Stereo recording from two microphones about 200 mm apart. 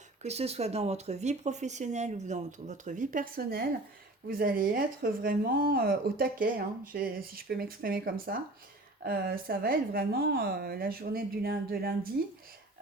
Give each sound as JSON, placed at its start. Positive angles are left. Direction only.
{"t": 0.2, "sound": "speech", "side_deg": -30}